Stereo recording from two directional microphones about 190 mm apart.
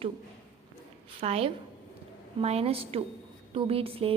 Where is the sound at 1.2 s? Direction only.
30° right (ahead or behind).